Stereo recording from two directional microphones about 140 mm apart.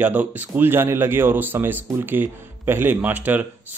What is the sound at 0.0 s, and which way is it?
A man's voice, 10° right (ahead or behind).